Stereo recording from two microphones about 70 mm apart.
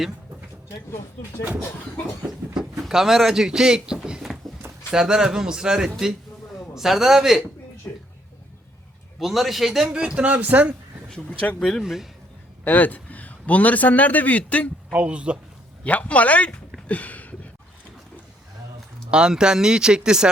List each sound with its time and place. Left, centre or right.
2.6 s a man's voice: centre
7.9 s a sound: left
9.1 s a man's voice: centre
9.9 s speech: centre
11.1 s speech: centre
11.8 s a man's voice: centre
12.6 s a man's voice: left
14.9 s speech: centre
15.8 s speech: centre
16.9 s a sound: left
19.1 s speech: centre